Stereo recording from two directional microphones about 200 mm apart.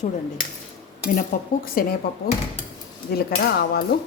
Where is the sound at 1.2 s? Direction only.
45° left (ahead or behind).